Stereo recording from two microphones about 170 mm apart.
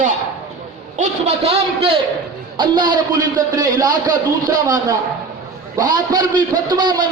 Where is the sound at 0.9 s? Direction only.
40° right (ahead or behind).